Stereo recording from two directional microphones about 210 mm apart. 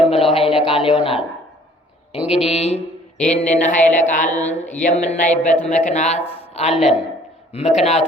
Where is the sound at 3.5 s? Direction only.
35° left (ahead or behind).